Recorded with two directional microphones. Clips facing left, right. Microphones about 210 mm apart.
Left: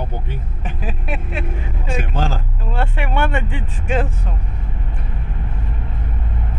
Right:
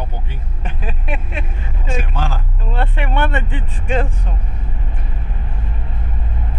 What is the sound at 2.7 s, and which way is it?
Speech, 10° left (ahead or behind).